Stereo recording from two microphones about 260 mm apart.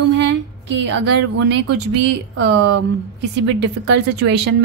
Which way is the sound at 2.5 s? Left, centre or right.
Right.